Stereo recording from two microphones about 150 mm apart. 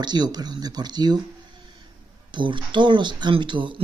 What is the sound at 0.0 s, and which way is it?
Speech, 30° right (ahead or behind).